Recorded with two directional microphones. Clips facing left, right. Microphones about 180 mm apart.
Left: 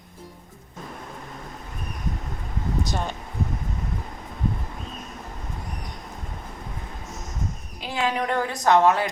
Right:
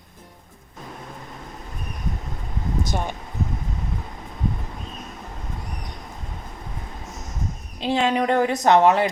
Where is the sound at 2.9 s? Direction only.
15° right (ahead or behind).